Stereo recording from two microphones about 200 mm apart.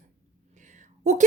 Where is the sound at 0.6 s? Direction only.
40° right (ahead or behind).